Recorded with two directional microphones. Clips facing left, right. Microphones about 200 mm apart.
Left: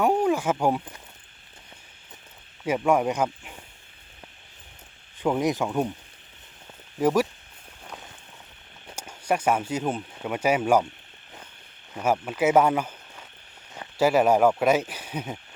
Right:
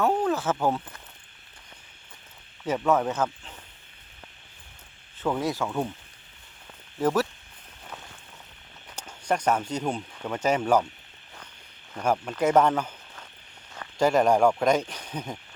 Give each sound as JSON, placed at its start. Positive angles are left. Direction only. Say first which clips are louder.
{"t": 0.0, "sound": "speech", "louder": "left 2 dB", "side_deg": 10}
{"t": 2.6, "sound": "speech", "louder": "left 2 dB", "side_deg": 10}
{"t": 5.2, "sound": "speech", "louder": "left 3 dB", "side_deg": 15}
{"t": 7.0, "sound": "speech", "louder": "left 2 dB", "side_deg": 10}
{"t": 9.0, "sound": "speech", "louder": "left 1 dB", "side_deg": 10}
{"t": 11.9, "sound": "speech", "louder": "left 1 dB", "side_deg": 5}